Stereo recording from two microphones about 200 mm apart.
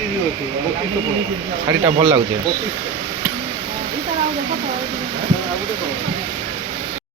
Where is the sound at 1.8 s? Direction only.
25° right (ahead or behind).